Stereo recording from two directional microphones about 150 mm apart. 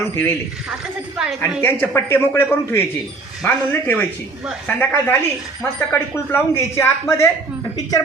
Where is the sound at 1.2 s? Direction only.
5° right (ahead or behind).